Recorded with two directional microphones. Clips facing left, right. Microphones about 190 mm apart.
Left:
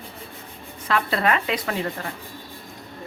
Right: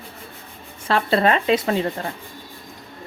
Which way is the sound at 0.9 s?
30° right (ahead or behind).